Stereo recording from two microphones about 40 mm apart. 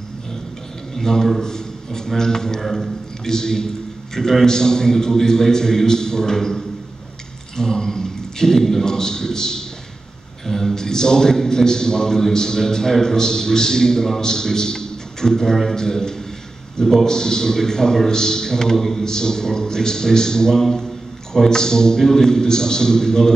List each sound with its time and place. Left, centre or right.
0.9 s a man's voice: centre